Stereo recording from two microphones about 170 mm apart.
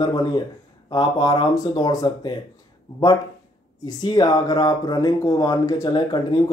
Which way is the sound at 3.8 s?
25° left (ahead or behind).